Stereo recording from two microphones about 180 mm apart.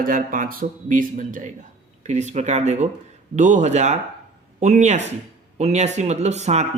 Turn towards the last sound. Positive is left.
turn(degrees=-40)  # may be behind; listen again after turning